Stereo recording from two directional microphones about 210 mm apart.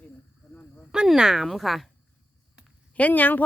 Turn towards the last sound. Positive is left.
turn(degrees=10)  # may be behind; listen again after turning